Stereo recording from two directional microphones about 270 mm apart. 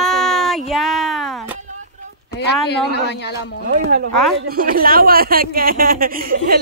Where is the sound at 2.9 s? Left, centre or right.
Left.